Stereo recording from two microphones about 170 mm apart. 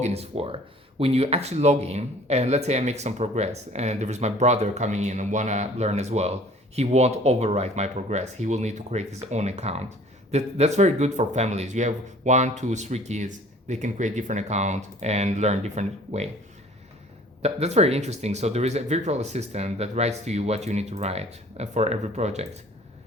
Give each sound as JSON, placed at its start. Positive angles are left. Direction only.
{"t": 0.0, "sound": "speech", "side_deg": -35}
{"t": 17.4, "sound": "speech", "side_deg": -40}